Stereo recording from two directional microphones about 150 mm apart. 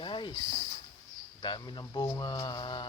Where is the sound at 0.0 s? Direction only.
30° left (ahead or behind).